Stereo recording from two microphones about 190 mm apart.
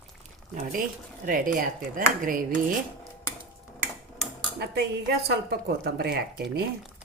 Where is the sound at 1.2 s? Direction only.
45° right (ahead or behind).